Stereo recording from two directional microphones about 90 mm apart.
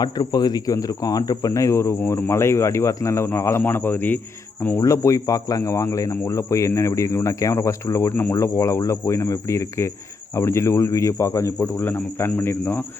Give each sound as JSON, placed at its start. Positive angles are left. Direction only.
{"t": 0.0, "sound": "speech", "side_deg": 50}
{"t": 4.8, "sound": "speech", "side_deg": 35}
{"t": 8.1, "sound": "speech", "side_deg": 25}
{"t": 11.8, "sound": "speech", "side_deg": 20}